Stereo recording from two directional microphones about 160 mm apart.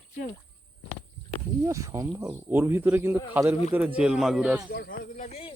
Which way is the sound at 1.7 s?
20° right (ahead or behind).